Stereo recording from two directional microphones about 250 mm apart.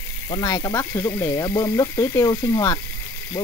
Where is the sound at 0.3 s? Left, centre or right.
Centre.